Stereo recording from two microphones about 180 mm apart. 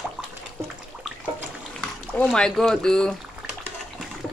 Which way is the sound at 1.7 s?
5° left (ahead or behind).